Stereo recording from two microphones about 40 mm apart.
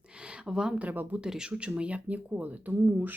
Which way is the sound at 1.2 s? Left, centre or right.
Centre.